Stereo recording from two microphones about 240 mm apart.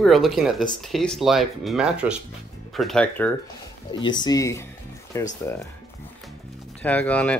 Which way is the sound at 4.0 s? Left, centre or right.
Centre.